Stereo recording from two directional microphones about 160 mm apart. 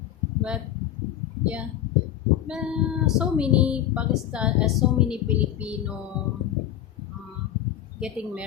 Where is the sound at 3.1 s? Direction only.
5° right (ahead or behind).